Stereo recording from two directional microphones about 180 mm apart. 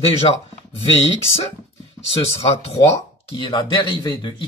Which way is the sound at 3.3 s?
25° left (ahead or behind).